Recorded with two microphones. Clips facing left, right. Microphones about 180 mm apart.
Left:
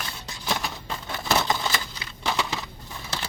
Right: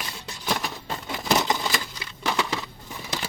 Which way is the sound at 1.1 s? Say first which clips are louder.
Right 1 dB; 10° right (ahead or behind).